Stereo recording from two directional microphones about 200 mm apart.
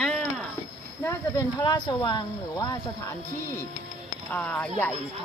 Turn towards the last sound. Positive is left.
turn(degrees=10)  # may be behind; listen again after turning